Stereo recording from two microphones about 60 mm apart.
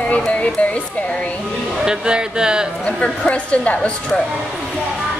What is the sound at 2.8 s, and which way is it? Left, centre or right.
A woman's voice, centre.